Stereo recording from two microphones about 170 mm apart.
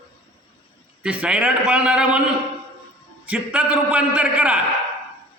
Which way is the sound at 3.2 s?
10° right (ahead or behind).